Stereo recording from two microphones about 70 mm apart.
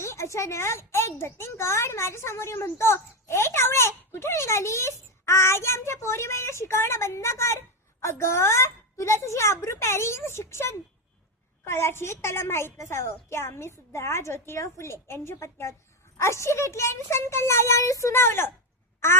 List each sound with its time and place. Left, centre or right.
0.0 s a child's voice: left